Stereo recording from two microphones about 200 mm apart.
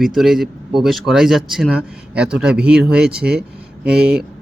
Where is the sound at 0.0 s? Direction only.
Centre (ahead or behind).